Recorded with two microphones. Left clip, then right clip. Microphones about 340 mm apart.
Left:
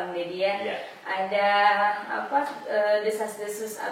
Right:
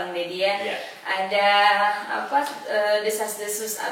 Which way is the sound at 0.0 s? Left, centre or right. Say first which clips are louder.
Right 3 dB; centre.